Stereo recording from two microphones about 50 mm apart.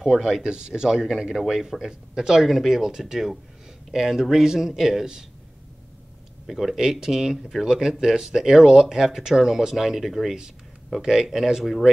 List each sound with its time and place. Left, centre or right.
0.0 s speech: centre
6.4 s speech: centre